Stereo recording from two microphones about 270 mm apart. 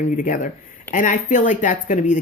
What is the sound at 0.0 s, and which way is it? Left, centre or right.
Speech, left.